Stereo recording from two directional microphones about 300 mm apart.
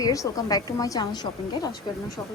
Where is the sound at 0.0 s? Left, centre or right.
Centre.